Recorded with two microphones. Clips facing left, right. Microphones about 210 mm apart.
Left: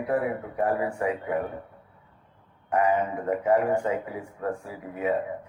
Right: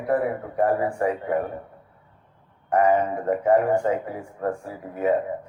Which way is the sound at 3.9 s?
40° right (ahead or behind).